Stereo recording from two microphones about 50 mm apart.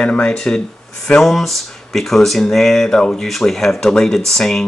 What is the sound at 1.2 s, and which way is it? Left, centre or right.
Speech, centre.